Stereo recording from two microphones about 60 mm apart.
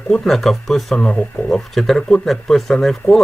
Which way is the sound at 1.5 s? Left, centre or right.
Centre.